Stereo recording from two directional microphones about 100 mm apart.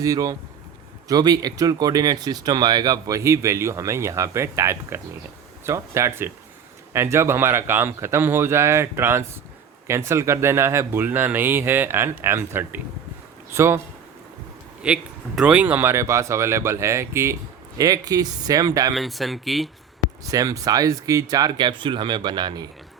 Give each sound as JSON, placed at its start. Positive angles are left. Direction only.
{"t": 0.0, "sound": "speech", "side_deg": -35}
{"t": 14.8, "sound": "a man's voice", "side_deg": -10}
{"t": 18.9, "sound": "speech", "side_deg": 0}
{"t": 20.3, "sound": "speech", "side_deg": -35}
{"t": 21.6, "sound": "speech", "side_deg": -55}